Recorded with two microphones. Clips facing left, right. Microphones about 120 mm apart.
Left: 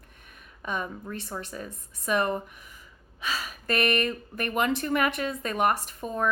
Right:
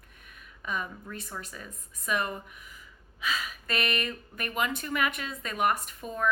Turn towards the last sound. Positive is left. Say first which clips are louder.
# left 4 dB
turn(degrees=35)  # may be behind; listen again after turning